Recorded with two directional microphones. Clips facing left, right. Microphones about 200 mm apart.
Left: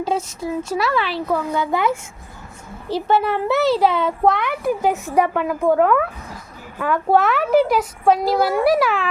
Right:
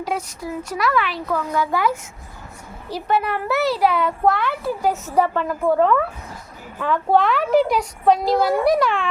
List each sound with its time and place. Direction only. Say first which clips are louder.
0.0 s a child's voice: left 4 dB; 25° left (ahead or behind); by 9.0 s 5° left (ahead or behind)